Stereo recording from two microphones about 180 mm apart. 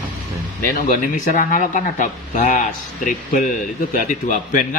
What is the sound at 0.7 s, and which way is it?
Speech, 50° left (ahead or behind).